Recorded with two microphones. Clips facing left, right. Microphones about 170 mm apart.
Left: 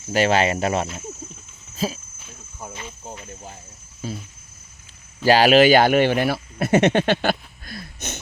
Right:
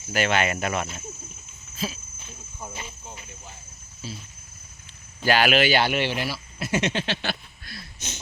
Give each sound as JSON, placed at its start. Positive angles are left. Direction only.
{"t": 0.1, "sound": "speech", "side_deg": 35}
{"t": 1.7, "sound": "speech", "side_deg": 40}
{"t": 3.1, "sound": "speech", "side_deg": 40}
{"t": 5.2, "sound": "speech", "side_deg": 35}